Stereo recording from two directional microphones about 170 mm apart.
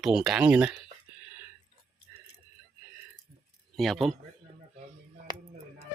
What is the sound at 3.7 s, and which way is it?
Speech, centre (ahead or behind).